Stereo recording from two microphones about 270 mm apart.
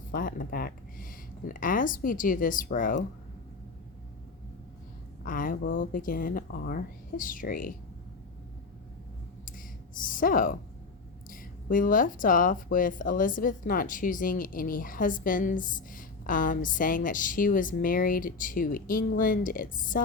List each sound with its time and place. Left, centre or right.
0.1 s speech: left
5.2 s speech: left
9.5 s a sound: left
11.3 s speech: left